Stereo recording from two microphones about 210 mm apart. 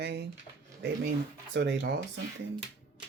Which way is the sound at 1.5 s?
60° right (ahead or behind).